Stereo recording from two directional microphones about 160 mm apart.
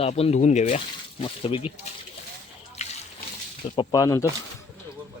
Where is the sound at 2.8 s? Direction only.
45° left (ahead or behind).